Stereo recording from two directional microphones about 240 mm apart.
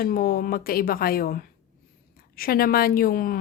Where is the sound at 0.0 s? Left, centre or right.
Left.